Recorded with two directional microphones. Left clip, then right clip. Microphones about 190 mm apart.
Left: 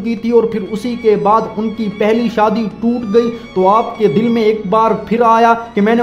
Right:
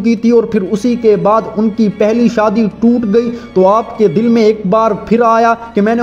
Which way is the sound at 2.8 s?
Centre (ahead or behind).